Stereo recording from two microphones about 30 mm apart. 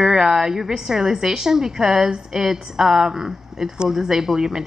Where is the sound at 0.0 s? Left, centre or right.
Centre.